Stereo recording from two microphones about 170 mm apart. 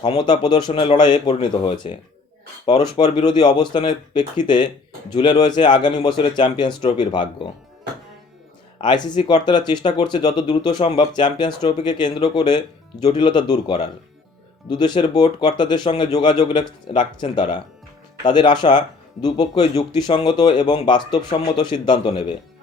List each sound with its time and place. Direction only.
0.0 s speech: 25° left (ahead or behind)
8.8 s speech: 25° left (ahead or behind)